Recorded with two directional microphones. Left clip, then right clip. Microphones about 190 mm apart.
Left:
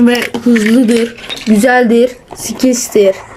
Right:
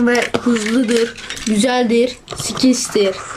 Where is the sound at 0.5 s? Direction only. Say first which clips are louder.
Left 7 dB; 25° left (ahead or behind).